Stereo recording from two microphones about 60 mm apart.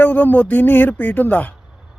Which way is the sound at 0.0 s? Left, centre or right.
Left.